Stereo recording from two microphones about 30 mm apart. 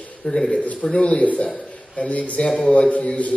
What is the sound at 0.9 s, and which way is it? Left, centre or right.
Speech, left.